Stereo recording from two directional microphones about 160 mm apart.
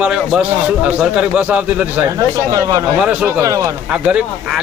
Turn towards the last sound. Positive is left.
turn(degrees=-5)  # may be behind; listen again after turning